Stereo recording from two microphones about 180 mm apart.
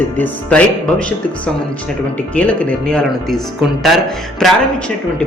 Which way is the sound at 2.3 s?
5° left (ahead or behind).